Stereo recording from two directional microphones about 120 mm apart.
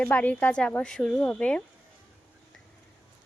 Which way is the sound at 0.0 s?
15° left (ahead or behind).